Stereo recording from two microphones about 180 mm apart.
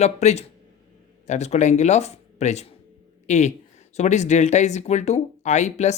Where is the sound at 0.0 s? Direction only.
40° left (ahead or behind).